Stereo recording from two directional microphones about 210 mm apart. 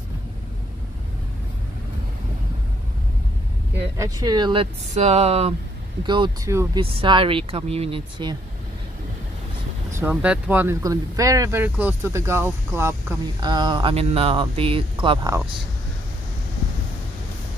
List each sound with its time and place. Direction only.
3.7 s speech: 10° right (ahead or behind)
6.8 s speech: 25° right (ahead or behind)
9.9 s speech: 5° right (ahead or behind)